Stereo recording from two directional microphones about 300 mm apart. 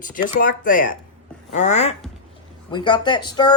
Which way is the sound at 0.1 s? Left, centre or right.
Left.